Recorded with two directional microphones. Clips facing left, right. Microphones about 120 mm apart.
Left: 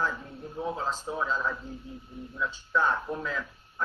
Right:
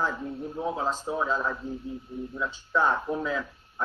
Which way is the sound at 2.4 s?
20° right (ahead or behind).